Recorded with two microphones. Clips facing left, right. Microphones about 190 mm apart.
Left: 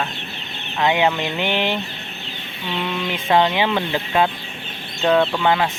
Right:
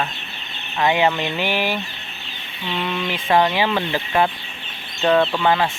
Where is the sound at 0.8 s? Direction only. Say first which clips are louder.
Even; 15° left (ahead or behind).